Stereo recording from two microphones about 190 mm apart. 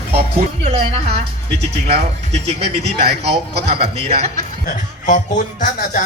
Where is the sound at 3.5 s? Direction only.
55° right (ahead or behind).